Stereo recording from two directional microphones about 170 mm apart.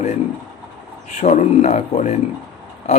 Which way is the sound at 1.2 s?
40° left (ahead or behind).